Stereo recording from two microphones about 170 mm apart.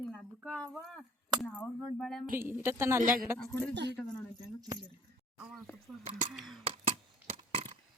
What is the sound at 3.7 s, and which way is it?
Speech, 85° right.